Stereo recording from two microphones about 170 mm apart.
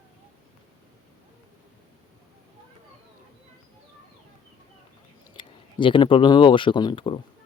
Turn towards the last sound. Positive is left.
turn(degrees=30)  # may be behind; listen again after turning